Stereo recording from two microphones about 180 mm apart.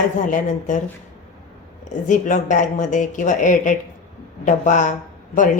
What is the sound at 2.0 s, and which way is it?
Speech, 45° left (ahead or behind).